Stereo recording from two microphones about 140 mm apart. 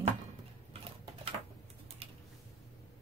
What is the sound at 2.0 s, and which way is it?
Typing, 40° right (ahead or behind).